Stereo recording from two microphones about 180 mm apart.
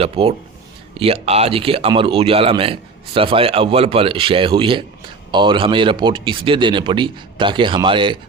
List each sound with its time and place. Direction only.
0.0 s speech: 35° right (ahead or behind)